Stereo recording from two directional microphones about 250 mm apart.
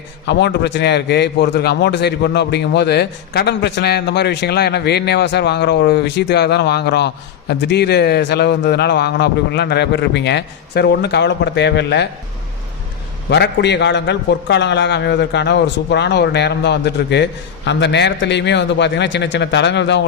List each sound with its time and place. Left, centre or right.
0.3 s a man's voice: left
13.3 s a man's voice: left